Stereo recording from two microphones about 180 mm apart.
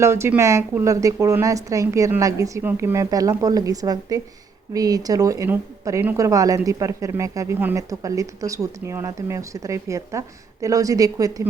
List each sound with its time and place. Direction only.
0.0 s a woman's voice: 15° right (ahead or behind)